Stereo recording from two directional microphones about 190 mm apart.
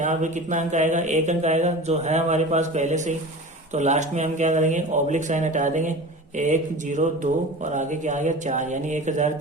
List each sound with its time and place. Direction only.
0.0 s speech: 40° right (ahead or behind)